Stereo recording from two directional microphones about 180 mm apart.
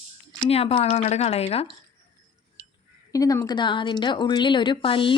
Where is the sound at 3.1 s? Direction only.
20° left (ahead or behind).